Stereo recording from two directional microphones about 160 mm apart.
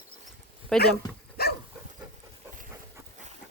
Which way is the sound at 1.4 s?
75° left (ahead or behind).